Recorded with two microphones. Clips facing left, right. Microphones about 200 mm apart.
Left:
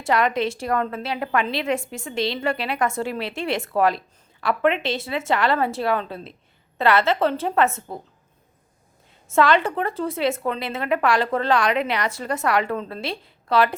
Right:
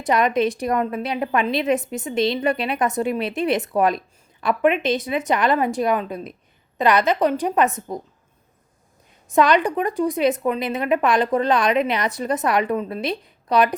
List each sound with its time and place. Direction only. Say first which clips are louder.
0.0 s a woman's voice: right 2 dB; 20° right (ahead or behind)
9.3 s a woman's voice: right 2 dB; 15° right (ahead or behind)